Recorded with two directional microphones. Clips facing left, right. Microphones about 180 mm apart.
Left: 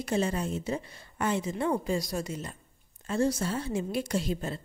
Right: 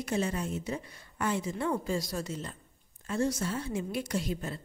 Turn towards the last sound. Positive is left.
turn(degrees=30)  # may be behind; listen again after turning